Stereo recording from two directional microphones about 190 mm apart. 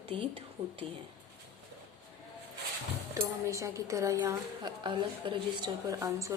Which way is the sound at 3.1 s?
15° right (ahead or behind).